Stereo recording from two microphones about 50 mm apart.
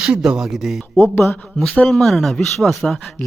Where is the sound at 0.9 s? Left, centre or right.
Left.